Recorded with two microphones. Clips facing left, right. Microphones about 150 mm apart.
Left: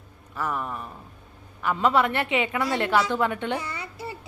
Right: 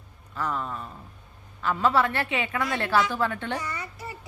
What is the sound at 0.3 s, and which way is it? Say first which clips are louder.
A woman's voice: left 1 dB; 15° left (ahead or behind).